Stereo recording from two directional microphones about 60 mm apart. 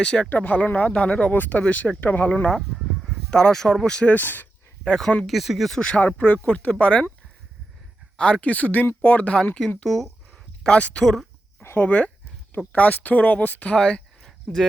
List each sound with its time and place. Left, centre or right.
0.0 s speech: centre
2.2 s speech: centre
4.0 s speech: left
4.9 s speech: centre
6.0 s speech: left
8.1 s speech: centre
9.6 s speech: centre
10.6 s speech: centre
11.0 s speech: centre
11.8 s speech: left
13.7 s a sound: centre
14.5 s speech: centre